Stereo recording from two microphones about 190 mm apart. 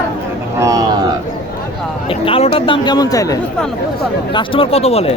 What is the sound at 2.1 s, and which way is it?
Speech, 30° left (ahead or behind).